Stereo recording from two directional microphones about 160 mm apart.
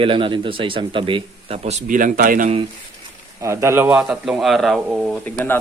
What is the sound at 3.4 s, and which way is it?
Speech, 15° right (ahead or behind).